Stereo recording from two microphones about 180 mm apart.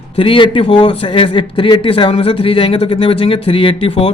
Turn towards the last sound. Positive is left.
turn(degrees=30)  # may be behind; listen again after turning